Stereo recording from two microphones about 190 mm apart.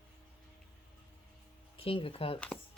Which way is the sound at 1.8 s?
30° left (ahead or behind).